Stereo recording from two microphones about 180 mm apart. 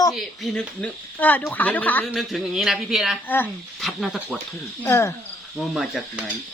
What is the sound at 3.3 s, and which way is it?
Speech, 10° left (ahead or behind).